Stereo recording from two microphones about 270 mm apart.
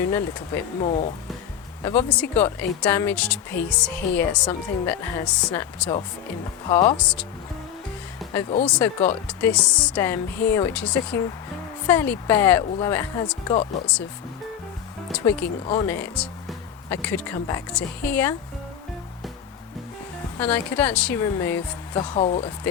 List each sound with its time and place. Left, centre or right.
0.0 s speech: centre
2.0 s a woman's voice: centre
8.3 s speech: centre
15.2 s speech: centre
20.4 s speech: centre
22.1 s speech: left